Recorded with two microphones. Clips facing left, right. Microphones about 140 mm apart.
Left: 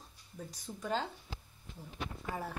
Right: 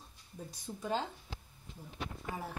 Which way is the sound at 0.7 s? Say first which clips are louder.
Right 3 dB; 5° right (ahead or behind).